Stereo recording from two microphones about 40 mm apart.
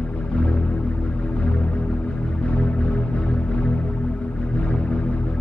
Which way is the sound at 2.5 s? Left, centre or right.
Left.